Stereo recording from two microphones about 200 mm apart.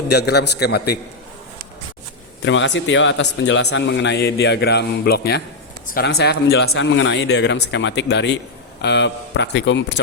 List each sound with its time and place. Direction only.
0.1 s a man's voice: 55° left (ahead or behind)
2.4 s a man's voice: 65° left (ahead or behind)